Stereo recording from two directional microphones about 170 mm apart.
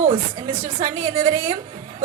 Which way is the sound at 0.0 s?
30° right (ahead or behind).